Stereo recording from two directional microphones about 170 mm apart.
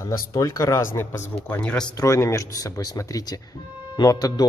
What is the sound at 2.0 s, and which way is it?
Speech, 15° left (ahead or behind).